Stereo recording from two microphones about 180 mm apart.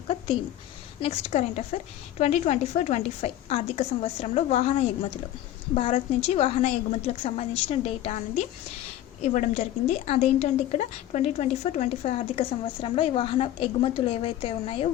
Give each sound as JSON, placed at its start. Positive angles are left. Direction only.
{"t": 1.0, "sound": "a woman's voice", "side_deg": 40}
{"t": 9.2, "sound": "a woman's voice", "side_deg": 40}